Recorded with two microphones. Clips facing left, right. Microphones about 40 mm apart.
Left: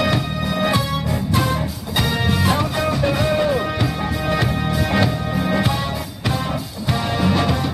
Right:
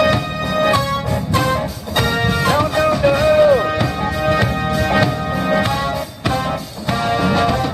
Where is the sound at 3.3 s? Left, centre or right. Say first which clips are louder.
Right 7 dB; centre.